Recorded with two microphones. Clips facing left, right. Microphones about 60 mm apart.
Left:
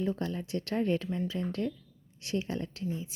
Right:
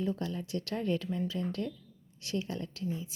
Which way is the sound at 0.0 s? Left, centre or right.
Left.